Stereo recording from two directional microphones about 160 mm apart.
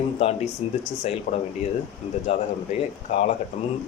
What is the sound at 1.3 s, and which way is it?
A man's voice, 55° left (ahead or behind).